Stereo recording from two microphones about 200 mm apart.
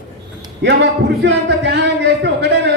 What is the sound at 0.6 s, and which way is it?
A man's voice, 60° right (ahead or behind).